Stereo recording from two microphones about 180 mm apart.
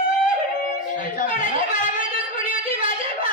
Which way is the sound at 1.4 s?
45° left (ahead or behind).